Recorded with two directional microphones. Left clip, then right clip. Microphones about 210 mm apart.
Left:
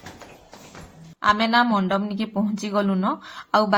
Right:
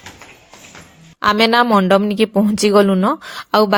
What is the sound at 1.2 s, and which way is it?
Speech, 50° right (ahead or behind).